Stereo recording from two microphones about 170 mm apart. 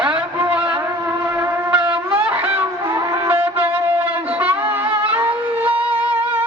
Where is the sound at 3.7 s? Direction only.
10° right (ahead or behind).